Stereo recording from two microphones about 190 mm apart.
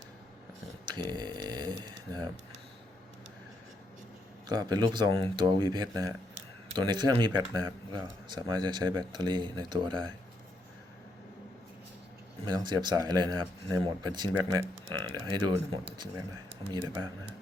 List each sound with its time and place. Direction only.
0.9 s a sound: 20° right (ahead or behind)
4.4 s speech: 20° right (ahead or behind)
12.5 s speech: 20° right (ahead or behind)